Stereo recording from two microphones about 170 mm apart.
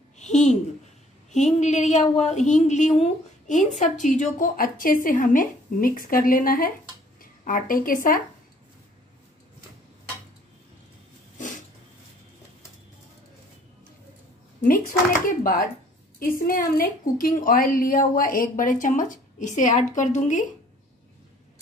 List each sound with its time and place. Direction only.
0.2 s a woman's voice: 45° left (ahead or behind)
14.6 s a woman's voice: 55° left (ahead or behind)